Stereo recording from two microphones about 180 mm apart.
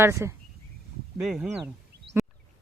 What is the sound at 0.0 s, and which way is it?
Speech, 15° right (ahead or behind).